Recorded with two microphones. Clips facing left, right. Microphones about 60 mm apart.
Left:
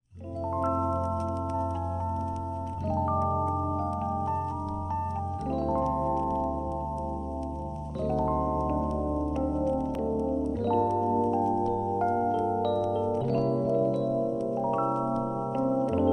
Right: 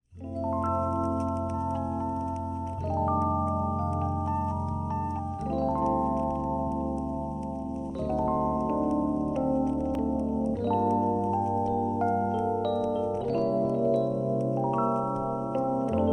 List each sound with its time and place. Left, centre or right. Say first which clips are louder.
0.7 s music: left 2 dB; centre
2.9 s music: right 1 dB; centre
5.5 s music: right 1 dB; centre
6.1 s music: left 1 dB; centre
8.3 s keyboard: right 1 dB; centre
8.9 s music: right 2 dB; centre
10.6 s music: even; centre
11.4 s music: left 1 dB; centre
11.7 s music: even; centre
13.3 s keyboard: right 1 dB; centre
14.5 s music: right 1 dB; centre
15.0 s keyboard: even; centre